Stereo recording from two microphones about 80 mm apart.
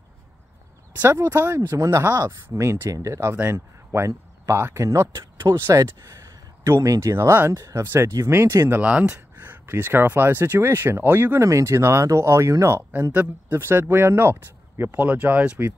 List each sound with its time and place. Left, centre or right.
1.2 s speech: right
1.8 s speech: right
3.3 s speech: right
5.9 s a sound: right
6.8 s speech: right
7.5 s speech: right
7.8 s speech: right
8.7 s speech: centre; by 12.8 s right
13.1 s speech: right